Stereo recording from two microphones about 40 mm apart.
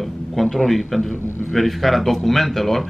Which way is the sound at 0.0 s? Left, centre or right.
Centre.